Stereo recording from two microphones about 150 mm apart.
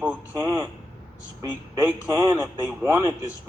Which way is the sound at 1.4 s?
25° right (ahead or behind).